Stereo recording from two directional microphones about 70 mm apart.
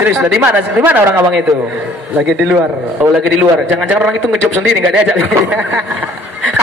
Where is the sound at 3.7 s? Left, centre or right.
Centre.